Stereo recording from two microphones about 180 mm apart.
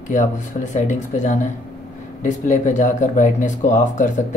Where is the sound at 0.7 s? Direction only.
45° left (ahead or behind).